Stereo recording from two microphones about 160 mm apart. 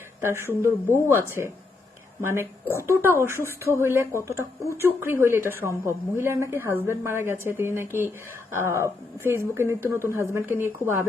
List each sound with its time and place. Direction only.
0.2 s speech: 15° right (ahead or behind)